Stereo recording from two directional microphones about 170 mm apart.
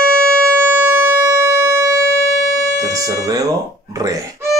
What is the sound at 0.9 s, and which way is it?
Siren, 15° right (ahead or behind).